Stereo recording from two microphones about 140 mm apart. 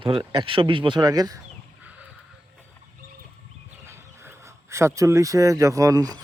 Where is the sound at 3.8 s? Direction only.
20° right (ahead or behind).